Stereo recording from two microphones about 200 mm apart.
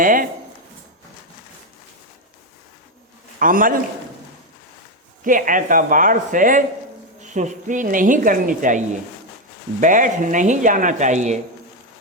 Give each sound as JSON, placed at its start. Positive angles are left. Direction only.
{"t": 0.0, "sound": "a man's voice", "side_deg": -45}
{"t": 3.3, "sound": "a man's voice", "side_deg": -45}
{"t": 5.2, "sound": "a woman's voice", "side_deg": -40}
{"t": 9.8, "sound": "a woman's voice", "side_deg": -40}